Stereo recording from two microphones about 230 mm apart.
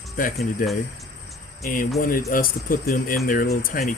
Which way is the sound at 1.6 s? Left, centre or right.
Left.